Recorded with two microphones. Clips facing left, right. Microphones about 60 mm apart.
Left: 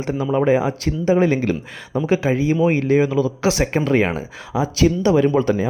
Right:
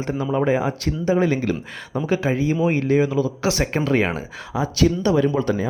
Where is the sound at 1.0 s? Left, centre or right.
Left.